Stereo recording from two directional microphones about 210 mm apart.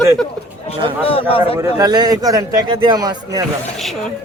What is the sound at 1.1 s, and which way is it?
Speech, 25° left (ahead or behind).